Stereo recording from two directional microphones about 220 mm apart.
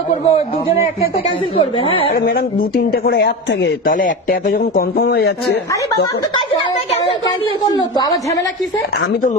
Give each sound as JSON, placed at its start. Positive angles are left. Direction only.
{"t": 0.1, "sound": "speech", "side_deg": 30}
{"t": 1.5, "sound": "speech", "side_deg": 25}
{"t": 2.1, "sound": "speech", "side_deg": 45}
{"t": 6.9, "sound": "speech", "side_deg": 20}